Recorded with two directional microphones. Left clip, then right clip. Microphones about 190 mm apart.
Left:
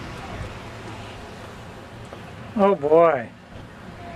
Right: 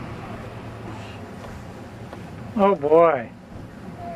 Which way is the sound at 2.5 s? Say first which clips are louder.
Even; 20° left (ahead or behind).